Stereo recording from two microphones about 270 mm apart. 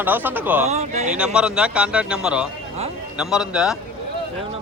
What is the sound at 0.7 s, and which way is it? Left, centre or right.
Speech, right.